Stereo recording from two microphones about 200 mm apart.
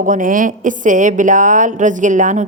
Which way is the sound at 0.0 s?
40° right (ahead or behind).